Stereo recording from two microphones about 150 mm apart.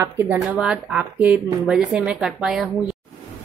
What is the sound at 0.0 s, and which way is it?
Speech, 15° right (ahead or behind).